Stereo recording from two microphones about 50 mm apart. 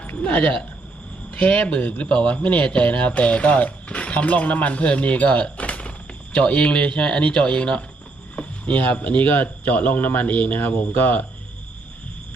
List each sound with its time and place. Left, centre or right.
0.2 s speech: left